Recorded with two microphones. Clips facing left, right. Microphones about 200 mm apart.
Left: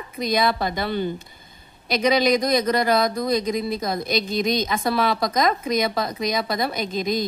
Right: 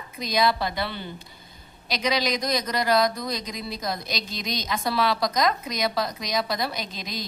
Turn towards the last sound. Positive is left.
turn(degrees=50)  # may be behind; listen again after turning